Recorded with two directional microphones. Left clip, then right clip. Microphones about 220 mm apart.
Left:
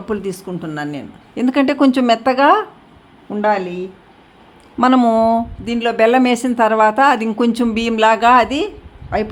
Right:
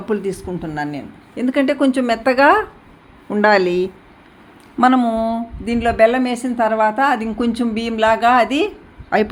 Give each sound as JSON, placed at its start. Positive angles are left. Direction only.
{"t": 0.0, "sound": "a woman's voice", "side_deg": 10}
{"t": 3.5, "sound": "speech", "side_deg": -10}
{"t": 4.9, "sound": "speech", "side_deg": 25}
{"t": 5.6, "sound": "a woman's voice", "side_deg": 10}
{"t": 6.1, "sound": "speech", "side_deg": 25}
{"t": 8.4, "sound": "a woman's voice", "side_deg": 5}